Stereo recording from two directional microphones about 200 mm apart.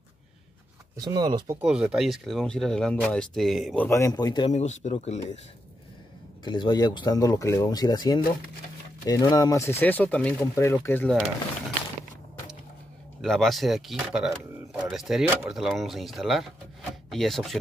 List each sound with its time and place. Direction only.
0.9 s speech: 20° right (ahead or behind)
1.6 s speech: 5° right (ahead or behind); by 4.5 s 20° left (ahead or behind)
4.5 s speech: 35° left (ahead or behind)
6.4 s speech: 20° left (ahead or behind)
13.2 s speech: centre (ahead or behind)